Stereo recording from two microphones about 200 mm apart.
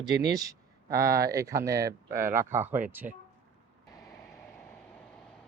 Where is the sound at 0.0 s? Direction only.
20° right (ahead or behind).